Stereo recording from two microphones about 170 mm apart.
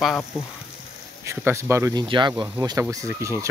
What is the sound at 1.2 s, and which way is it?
Speech, 15° right (ahead or behind).